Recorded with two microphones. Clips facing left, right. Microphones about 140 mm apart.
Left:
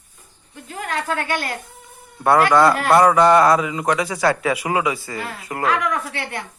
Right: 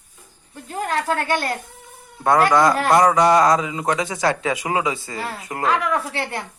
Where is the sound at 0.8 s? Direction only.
35° right (ahead or behind).